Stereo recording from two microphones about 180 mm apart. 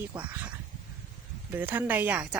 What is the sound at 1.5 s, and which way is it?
Speech, 10° right (ahead or behind).